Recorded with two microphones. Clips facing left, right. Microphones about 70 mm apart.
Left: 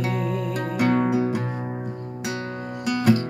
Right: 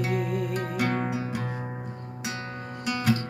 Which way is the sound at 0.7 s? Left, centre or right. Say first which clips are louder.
Left 10 dB; centre.